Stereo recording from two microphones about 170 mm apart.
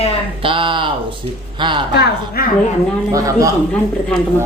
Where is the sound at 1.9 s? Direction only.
70° left (ahead or behind).